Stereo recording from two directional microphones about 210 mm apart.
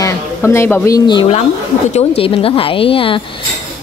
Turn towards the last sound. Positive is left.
turn(degrees=25)  # may be behind; listen again after turning